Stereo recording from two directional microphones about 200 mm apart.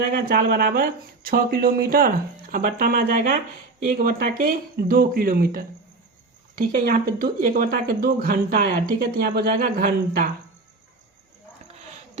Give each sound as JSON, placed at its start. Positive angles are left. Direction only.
{"t": 0.1, "sound": "speech", "side_deg": -45}